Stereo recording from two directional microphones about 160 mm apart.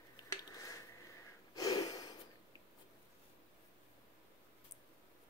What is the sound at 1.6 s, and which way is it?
Gasp, 25° left (ahead or behind).